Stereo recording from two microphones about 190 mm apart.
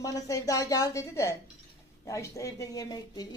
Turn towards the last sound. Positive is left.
turn(degrees=20)  # may be behind; listen again after turning